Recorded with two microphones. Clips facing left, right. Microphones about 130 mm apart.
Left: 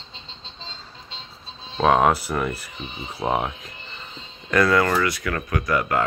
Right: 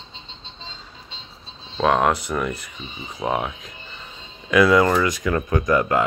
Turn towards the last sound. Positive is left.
turn(degrees=-20)  # may be behind; listen again after turning